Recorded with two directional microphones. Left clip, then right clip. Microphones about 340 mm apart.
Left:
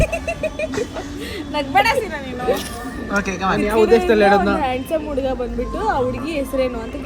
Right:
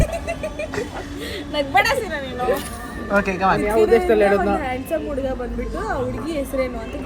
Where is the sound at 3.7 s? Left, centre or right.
Left.